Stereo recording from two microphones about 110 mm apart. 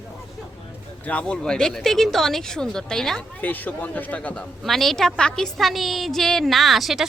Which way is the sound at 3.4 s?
15° left (ahead or behind).